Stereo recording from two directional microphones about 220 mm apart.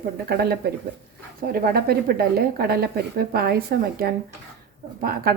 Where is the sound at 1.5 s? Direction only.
45° right (ahead or behind).